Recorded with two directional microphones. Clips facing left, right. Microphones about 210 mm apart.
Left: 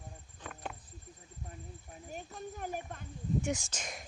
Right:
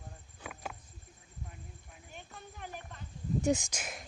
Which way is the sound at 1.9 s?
40° left (ahead or behind).